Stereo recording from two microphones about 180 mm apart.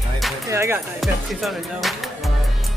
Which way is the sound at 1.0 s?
Centre (ahead or behind).